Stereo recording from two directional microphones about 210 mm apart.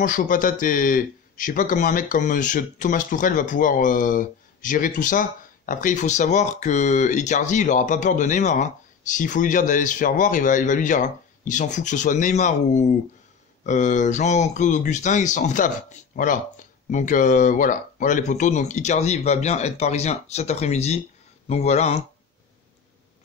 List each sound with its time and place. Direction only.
0.0 s speech: 40° left (ahead or behind)